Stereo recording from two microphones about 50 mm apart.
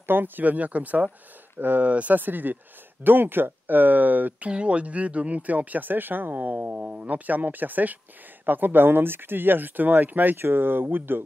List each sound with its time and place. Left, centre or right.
0.0 s speech: right
4.5 s speech: right
6.6 s speech: right
10.3 s speech: right